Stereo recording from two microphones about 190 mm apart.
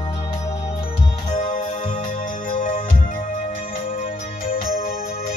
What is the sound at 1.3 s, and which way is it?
Music, 40° left (ahead or behind).